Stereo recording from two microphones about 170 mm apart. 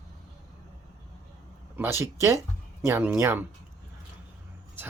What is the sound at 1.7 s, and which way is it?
Speech, 15° right (ahead or behind).